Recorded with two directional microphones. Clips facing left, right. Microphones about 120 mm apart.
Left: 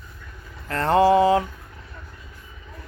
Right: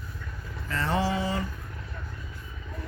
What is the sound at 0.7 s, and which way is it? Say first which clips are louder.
Speech: left 11 dB; 55° left (ahead or behind).